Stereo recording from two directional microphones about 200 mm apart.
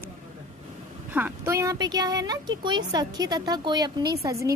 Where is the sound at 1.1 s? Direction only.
10° right (ahead or behind).